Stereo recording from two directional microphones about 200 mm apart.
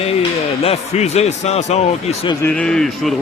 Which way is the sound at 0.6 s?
30° left (ahead or behind).